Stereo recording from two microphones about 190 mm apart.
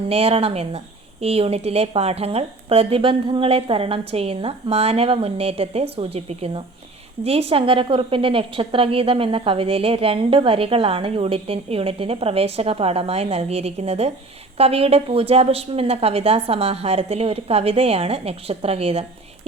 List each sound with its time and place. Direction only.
0.1 s a woman's voice: 30° right (ahead or behind)